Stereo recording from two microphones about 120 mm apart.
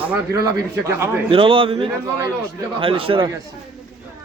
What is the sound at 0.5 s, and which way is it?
Speech, 25° right (ahead or behind).